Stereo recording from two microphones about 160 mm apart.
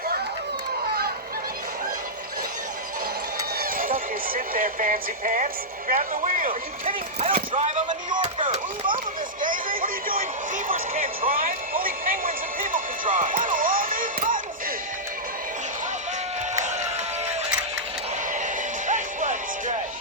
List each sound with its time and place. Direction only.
3.6 s horse: 60° right (ahead or behind)
5.9 s speech: 55° right (ahead or behind)
7.5 s speech: 45° right (ahead or behind)
8.1 s speech: 30° right (ahead or behind)
9.4 s speech: 60° right (ahead or behind)
18.3 s music: 50° right (ahead or behind)